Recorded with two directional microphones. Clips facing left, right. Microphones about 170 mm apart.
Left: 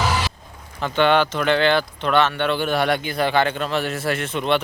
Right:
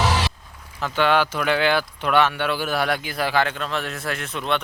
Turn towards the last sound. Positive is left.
turn(degrees=0)  # may be behind; listen again after turning